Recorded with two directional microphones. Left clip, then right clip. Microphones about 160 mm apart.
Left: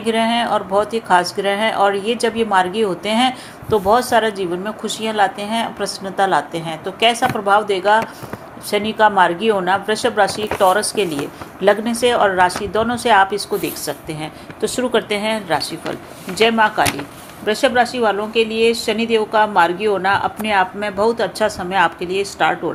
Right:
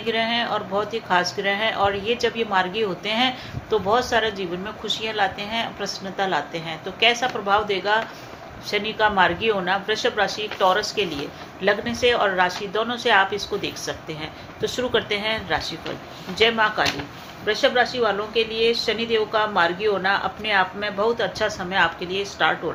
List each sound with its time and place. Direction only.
0.0 s speech: 45° left (ahead or behind)